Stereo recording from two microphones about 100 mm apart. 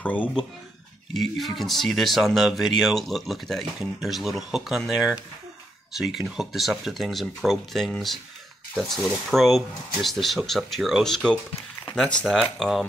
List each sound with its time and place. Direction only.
0.0 s speech: 15° left (ahead or behind)
1.1 s speech: centre (ahead or behind)